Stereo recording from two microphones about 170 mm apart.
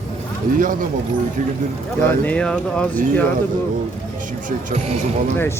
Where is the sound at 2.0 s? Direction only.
10° left (ahead or behind).